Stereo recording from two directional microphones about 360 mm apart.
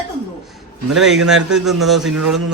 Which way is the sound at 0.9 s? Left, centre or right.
Centre.